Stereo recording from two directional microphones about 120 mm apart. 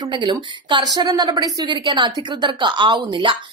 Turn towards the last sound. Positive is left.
turn(degrees=-45)  # may be behind; listen again after turning